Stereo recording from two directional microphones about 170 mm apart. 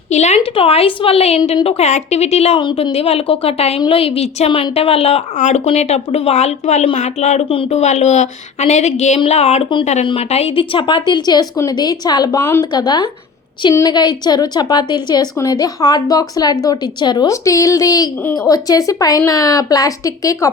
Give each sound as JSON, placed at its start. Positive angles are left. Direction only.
{"t": 0.1, "sound": "a woman's voice", "side_deg": 40}
{"t": 12.7, "sound": "a woman's voice", "side_deg": 25}